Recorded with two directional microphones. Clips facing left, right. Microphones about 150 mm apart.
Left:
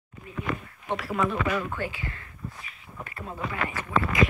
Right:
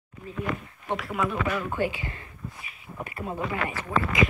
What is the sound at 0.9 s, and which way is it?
Speech, centre (ahead or behind).